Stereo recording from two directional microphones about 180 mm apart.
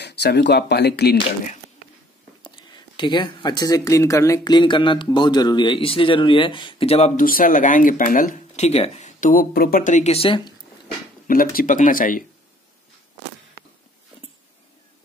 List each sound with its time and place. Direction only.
0.0 s speech: 70° left (ahead or behind)
2.4 s speech: 25° left (ahead or behind)
7.2 s speech: 50° left (ahead or behind); by 10.5 s 30° left (ahead or behind)
11.2 s speech: 50° left (ahead or behind)